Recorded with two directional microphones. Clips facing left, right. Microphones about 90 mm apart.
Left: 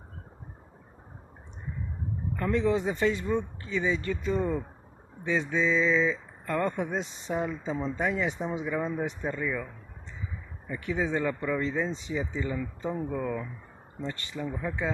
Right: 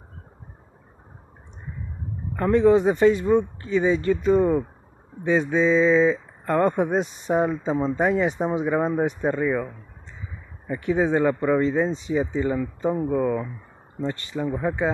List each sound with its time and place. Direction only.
2.3 s speech: 35° right (ahead or behind)
6.7 s speech: 50° right (ahead or behind)
10.7 s speech: 30° right (ahead or behind)